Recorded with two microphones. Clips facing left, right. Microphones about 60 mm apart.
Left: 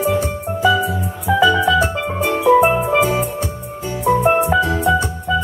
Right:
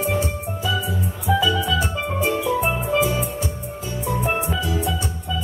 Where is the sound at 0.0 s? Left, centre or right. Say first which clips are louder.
Left 5 dB; left.